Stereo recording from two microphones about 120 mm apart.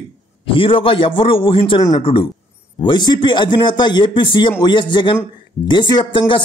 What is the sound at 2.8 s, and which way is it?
Speech, 40° left (ahead or behind).